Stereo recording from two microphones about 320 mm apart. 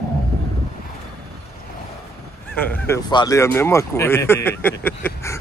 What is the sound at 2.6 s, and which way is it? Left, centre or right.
Speech, centre.